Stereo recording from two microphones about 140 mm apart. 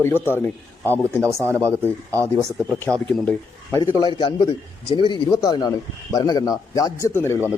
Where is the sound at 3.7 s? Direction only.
25° left (ahead or behind).